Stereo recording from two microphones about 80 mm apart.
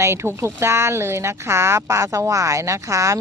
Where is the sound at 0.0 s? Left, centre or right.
Right.